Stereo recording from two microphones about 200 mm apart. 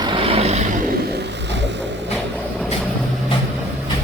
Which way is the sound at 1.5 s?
60° right (ahead or behind).